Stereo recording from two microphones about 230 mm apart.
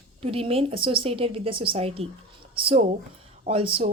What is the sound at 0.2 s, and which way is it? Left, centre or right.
Speech, right.